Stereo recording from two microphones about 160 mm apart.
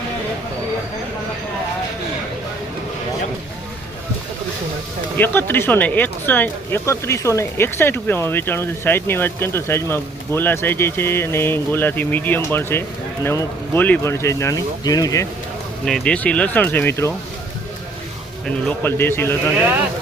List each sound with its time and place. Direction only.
5.1 s speech: 10° left (ahead or behind)
15.8 s speech: 5° left (ahead or behind)
18.4 s speech: 15° left (ahead or behind)